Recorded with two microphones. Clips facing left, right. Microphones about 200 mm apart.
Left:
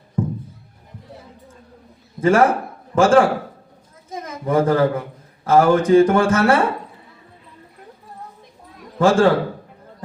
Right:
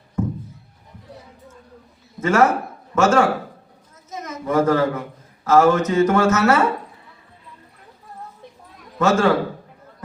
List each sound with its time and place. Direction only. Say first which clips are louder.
0.2 s music: left 1 dB; 30° left (ahead or behind)
2.2 s a man's voice: left 2 dB; 30° left (ahead or behind)
9.0 s a man's voice: left 3 dB; 30° left (ahead or behind)